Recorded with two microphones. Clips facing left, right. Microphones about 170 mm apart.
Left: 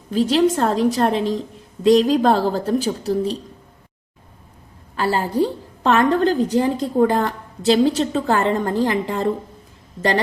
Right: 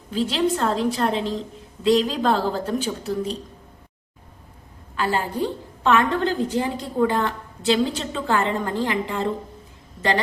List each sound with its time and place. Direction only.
0.1 s a woman's voice: 45° left (ahead or behind)
4.9 s a woman's voice: 35° left (ahead or behind)